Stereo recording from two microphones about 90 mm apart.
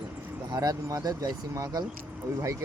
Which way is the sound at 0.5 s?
45° right (ahead or behind).